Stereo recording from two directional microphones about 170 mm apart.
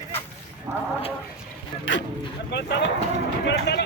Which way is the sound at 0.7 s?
15° right (ahead or behind).